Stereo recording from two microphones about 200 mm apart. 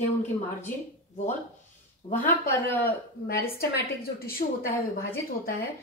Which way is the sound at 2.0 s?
25° left (ahead or behind).